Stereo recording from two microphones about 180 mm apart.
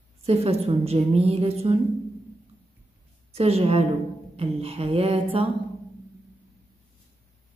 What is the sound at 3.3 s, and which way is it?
A woman's voice, 35° right (ahead or behind).